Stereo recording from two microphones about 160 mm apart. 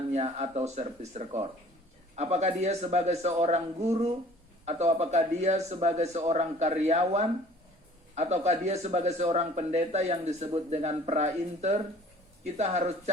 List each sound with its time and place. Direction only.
0.1 s speech: 45° right (ahead or behind)
4.6 s speech: 45° right (ahead or behind)